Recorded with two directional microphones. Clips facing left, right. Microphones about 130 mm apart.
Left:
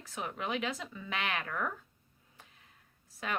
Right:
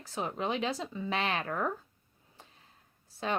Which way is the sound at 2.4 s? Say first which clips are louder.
Right 3 dB; 35° right (ahead or behind).